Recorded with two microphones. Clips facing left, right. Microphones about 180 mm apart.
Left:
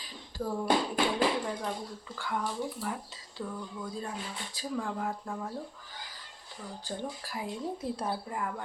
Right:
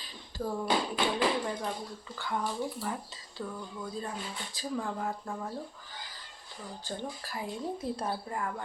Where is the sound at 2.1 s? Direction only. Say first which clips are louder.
Even; 5° left (ahead or behind).